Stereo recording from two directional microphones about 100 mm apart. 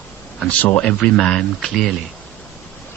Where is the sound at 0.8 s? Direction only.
10° left (ahead or behind).